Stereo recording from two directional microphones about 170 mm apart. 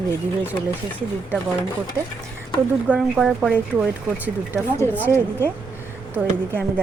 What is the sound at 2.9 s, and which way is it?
Speech, centre (ahead or behind).